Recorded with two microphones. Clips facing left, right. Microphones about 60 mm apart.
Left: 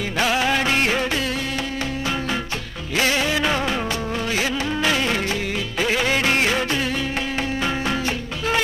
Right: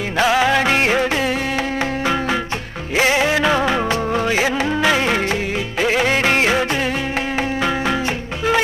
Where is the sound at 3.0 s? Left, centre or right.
Right.